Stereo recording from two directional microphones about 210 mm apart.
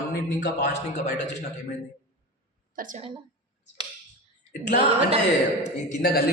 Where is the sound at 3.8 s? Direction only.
20° right (ahead or behind).